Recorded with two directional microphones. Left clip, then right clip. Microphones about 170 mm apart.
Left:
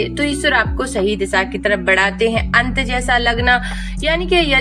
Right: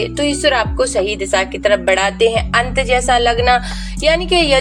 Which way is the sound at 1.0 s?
30° right (ahead or behind).